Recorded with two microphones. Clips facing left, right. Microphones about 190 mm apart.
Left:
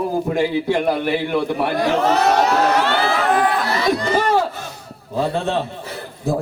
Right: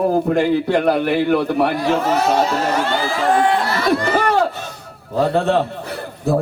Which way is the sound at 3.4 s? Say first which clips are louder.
Right 2 dB; 25° right (ahead or behind).